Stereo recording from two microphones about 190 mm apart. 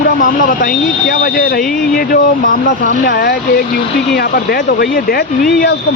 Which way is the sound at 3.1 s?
60° left (ahead or behind).